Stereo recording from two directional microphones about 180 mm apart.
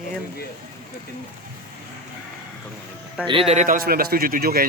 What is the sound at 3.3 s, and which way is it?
A man's voice, 30° right (ahead or behind).